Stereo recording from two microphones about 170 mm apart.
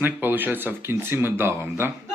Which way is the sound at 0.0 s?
10° right (ahead or behind).